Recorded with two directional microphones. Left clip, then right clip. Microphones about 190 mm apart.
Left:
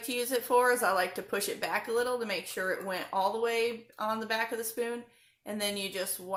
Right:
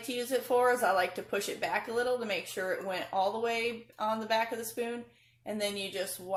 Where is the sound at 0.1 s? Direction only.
20° left (ahead or behind).